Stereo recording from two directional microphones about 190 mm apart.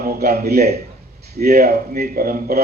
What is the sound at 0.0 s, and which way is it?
A man's voice, 50° right (ahead or behind).